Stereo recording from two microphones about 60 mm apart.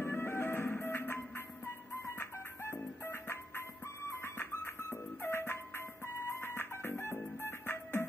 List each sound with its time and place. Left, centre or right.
0.0 s music: left